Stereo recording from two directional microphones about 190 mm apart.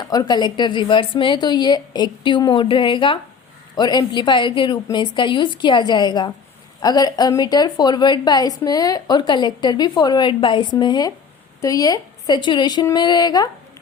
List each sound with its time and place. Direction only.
0.0 s a woman's voice: 20° left (ahead or behind)